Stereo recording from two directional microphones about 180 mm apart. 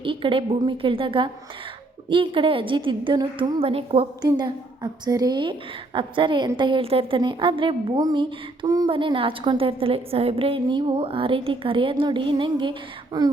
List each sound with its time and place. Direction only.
0.0 s a woman's voice: 30° right (ahead or behind)